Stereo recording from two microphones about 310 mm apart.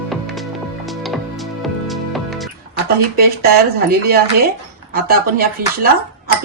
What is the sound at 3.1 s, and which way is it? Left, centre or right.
Speech, right.